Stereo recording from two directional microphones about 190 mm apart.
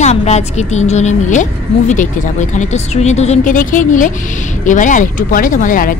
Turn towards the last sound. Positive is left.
turn(degrees=45)  # may be behind; listen again after turning